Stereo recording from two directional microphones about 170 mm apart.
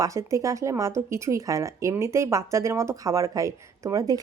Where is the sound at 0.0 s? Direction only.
20° right (ahead or behind).